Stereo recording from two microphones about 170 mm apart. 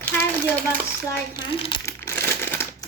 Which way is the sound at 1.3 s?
20° left (ahead or behind).